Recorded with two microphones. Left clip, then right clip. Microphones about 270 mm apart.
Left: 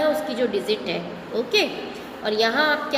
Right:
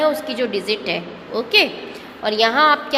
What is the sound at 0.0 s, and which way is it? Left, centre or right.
A woman's voice, right.